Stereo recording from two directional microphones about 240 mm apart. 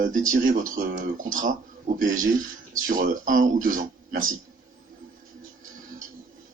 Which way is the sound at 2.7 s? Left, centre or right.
Right.